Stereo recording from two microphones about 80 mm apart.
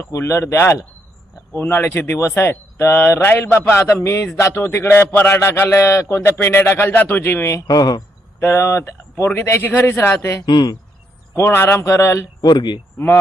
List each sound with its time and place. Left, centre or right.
0.0 s a man's voice: left
7.7 s speech: left
8.4 s a man's voice: left
10.4 s speech: left
11.3 s speech: left
12.4 s speech: left